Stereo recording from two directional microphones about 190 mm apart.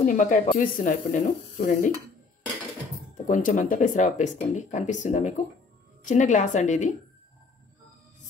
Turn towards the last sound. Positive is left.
turn(degrees=40)  # may be behind; listen again after turning